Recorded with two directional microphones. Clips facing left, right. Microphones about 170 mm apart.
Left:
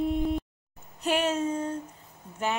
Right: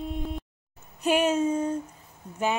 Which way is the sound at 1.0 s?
15° right (ahead or behind).